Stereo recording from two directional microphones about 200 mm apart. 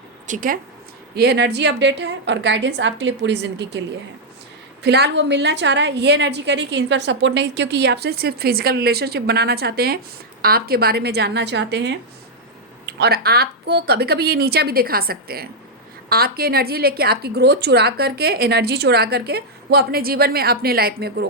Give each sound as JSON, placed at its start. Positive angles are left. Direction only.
{"t": 0.3, "sound": "a woman's voice", "side_deg": -45}
{"t": 1.1, "sound": "a woman's voice", "side_deg": -55}
{"t": 13.0, "sound": "a woman's voice", "side_deg": -50}